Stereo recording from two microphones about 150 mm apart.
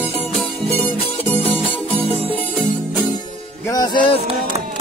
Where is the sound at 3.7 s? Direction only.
25° left (ahead or behind).